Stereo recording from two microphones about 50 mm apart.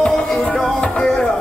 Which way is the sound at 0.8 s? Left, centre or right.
Centre.